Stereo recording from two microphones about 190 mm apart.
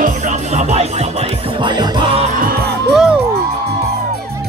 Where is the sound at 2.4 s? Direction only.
55° right (ahead or behind).